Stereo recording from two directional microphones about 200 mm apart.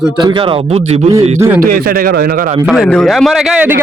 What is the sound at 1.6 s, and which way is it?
Speech, 45° right (ahead or behind).